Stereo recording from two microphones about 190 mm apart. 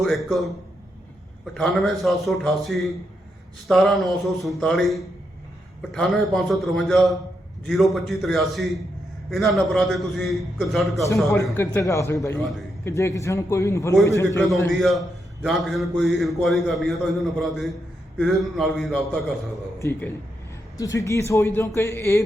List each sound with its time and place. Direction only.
0.0 s a man's voice: centre (ahead or behind)
1.5 s a man's voice: centre (ahead or behind)
11.5 s a man's voice: 10° left (ahead or behind)
14.8 s a man's voice: centre (ahead or behind)
19.8 s a man's voice: 10° left (ahead or behind)